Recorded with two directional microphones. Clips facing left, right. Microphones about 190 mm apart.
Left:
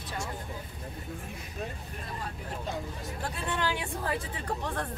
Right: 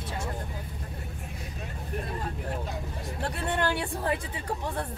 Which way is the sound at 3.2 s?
65° right (ahead or behind).